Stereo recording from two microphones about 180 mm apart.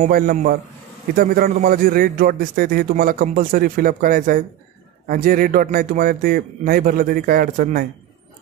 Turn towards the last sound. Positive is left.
turn(degrees=-55)  # may be behind; listen again after turning